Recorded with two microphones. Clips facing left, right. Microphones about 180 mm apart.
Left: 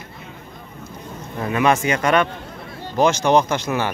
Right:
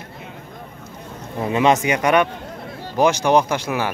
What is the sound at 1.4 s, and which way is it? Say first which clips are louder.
Speech: right 1 dB; 20° right (ahead or behind).